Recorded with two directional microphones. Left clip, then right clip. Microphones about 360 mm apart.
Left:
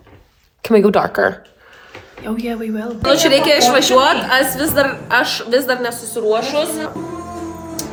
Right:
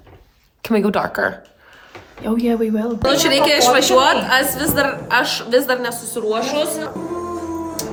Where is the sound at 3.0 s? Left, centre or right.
Centre.